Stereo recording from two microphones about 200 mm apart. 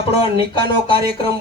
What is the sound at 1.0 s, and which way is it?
Speech, 50° right (ahead or behind).